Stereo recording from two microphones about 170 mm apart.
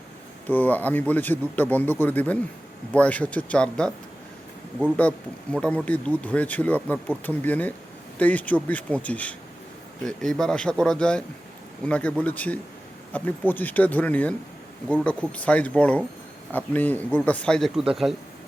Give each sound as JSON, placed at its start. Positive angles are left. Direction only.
{"t": 0.4, "sound": "speech", "side_deg": 10}
{"t": 4.9, "sound": "speech", "side_deg": 10}